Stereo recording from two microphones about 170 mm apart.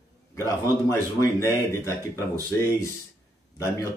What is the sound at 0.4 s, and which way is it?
Speech, 15° left (ahead or behind).